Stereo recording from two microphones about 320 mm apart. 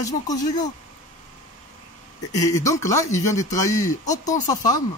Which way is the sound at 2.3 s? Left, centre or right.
Centre.